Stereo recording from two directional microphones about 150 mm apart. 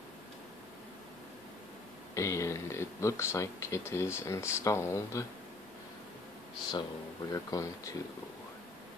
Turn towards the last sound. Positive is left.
turn(degrees=20)  # may be behind; listen again after turning